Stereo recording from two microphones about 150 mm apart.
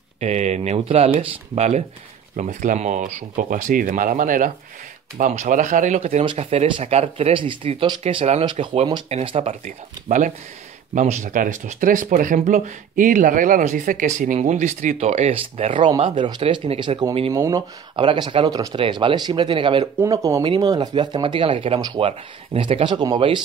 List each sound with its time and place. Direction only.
0.2 s speech: 50° right (ahead or behind)
17.3 s speech: 20° right (ahead or behind)
17.9 s speech: 35° right (ahead or behind)
20.0 s speech: 20° right (ahead or behind)